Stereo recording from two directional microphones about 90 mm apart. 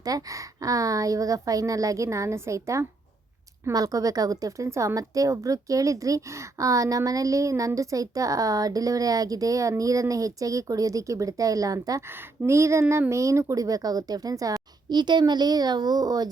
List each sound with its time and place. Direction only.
0.0 s a woman's voice: 40° right (ahead or behind)